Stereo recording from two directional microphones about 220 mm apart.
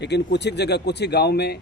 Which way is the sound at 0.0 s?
50° left (ahead or behind).